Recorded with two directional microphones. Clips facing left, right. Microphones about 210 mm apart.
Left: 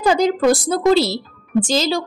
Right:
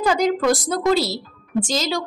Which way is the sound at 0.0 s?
30° left (ahead or behind).